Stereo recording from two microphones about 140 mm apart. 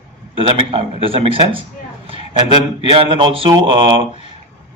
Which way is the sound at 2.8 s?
40° right (ahead or behind).